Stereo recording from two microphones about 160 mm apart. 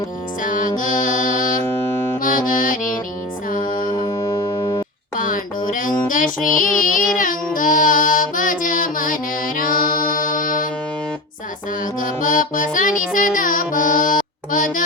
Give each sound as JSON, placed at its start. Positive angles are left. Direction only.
{"t": 0.4, "sound": "music", "side_deg": 55}
{"t": 3.9, "sound": "music", "side_deg": 35}
{"t": 5.1, "sound": "music", "side_deg": 55}
{"t": 11.9, "sound": "music", "side_deg": 55}